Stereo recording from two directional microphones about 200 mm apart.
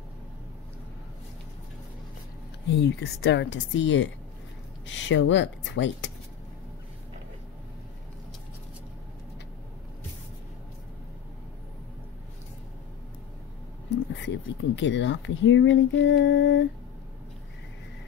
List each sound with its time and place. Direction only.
2.7 s speech: 60° left (ahead or behind)
13.8 s speech: 65° left (ahead or behind)